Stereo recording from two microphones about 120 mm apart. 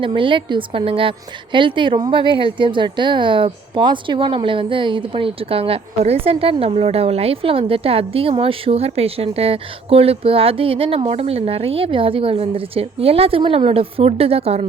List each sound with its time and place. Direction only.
0.0 s a woman's voice: 45° right (ahead or behind)